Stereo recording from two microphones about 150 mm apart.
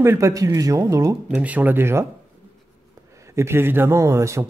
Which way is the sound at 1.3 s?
10° right (ahead or behind).